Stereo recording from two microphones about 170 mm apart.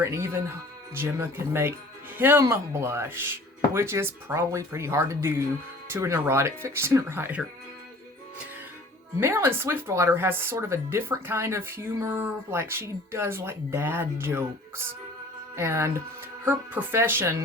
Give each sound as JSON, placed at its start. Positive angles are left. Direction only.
{"t": 0.0, "sound": "speech", "side_deg": -15}
{"t": 9.2, "sound": "speech", "side_deg": -15}